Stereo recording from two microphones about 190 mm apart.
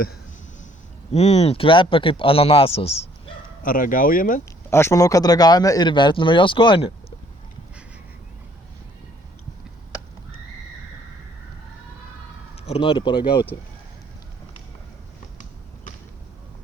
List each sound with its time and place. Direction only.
1.1 s speech: 35° left (ahead or behind)
3.6 s speech: 45° left (ahead or behind)
4.7 s speech: 15° left (ahead or behind)
12.6 s speech: 30° left (ahead or behind)